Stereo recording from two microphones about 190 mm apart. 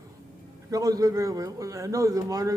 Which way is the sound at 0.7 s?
20° right (ahead or behind).